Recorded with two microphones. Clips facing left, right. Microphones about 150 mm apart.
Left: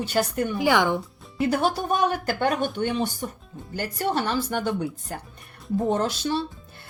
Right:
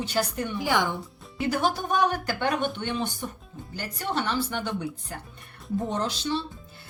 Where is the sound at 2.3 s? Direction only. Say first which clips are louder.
Left 3 dB; 40° left (ahead or behind).